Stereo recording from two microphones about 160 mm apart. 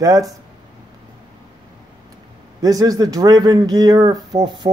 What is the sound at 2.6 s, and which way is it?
Speech, 20° right (ahead or behind).